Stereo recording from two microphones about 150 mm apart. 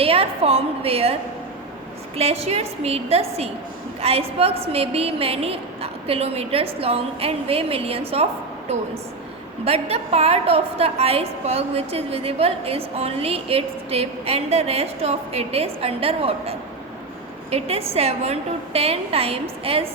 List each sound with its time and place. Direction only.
0.0 s a woman's voice: 40° right (ahead or behind)
2.1 s a woman's voice: 45° right (ahead or behind)
9.6 s a woman's voice: 45° right (ahead or behind)